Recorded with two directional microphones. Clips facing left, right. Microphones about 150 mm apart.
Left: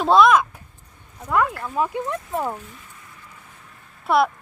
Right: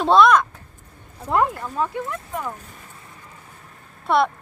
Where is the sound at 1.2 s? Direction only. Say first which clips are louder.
Right 1 dB; 30° right (ahead or behind).